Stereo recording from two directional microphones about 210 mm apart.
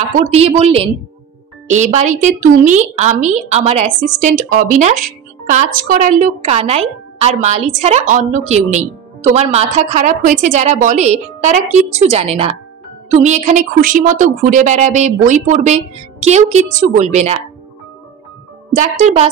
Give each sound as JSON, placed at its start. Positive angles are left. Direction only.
{"t": 0.2, "sound": "a woman's voice", "side_deg": -30}
{"t": 18.8, "sound": "a woman's voice", "side_deg": -35}